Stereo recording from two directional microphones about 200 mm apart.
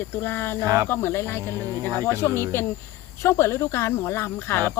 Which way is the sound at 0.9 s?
10° left (ahead or behind).